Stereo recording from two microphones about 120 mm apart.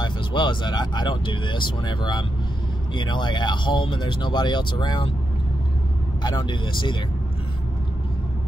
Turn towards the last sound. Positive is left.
turn(degrees=40)  # may be behind; listen again after turning